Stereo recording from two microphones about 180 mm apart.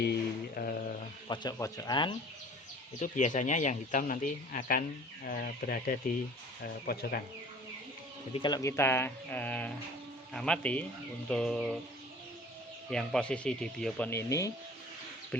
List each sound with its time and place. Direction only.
0.0 s mantra: 60° left (ahead or behind)
1.3 s speech: 25° left (ahead or behind)
3.0 s speech: 45° left (ahead or behind)
8.4 s speech: 20° left (ahead or behind); by 11.8 s centre (ahead or behind)
12.9 s speech: 5° left (ahead or behind)
14.1 s speech: 15° left (ahead or behind)